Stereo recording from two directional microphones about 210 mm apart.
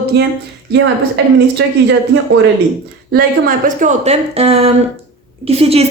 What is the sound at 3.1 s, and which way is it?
A woman's voice, 45° right (ahead or behind).